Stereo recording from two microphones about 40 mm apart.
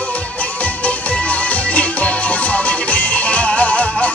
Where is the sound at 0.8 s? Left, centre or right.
Left.